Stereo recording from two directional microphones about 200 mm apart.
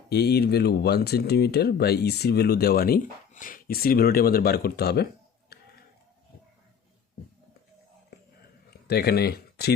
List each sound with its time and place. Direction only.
0.1 s speech: 55° left (ahead or behind)
5.5 s a sound: 50° left (ahead or behind)
8.9 s speech: 50° left (ahead or behind)